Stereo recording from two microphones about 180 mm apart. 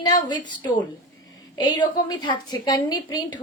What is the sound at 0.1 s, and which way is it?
Speech, 25° left (ahead or behind).